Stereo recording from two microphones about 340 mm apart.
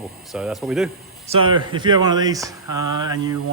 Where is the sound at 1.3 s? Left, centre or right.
Centre.